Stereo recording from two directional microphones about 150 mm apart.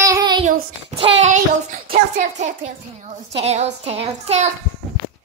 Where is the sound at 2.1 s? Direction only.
50° right (ahead or behind).